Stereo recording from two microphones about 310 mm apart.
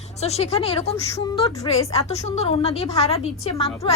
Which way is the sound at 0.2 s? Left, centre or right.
Centre.